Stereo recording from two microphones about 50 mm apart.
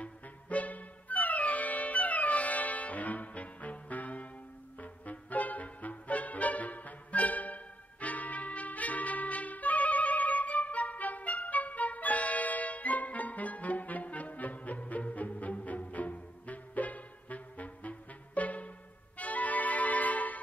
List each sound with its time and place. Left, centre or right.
0.0 s music: left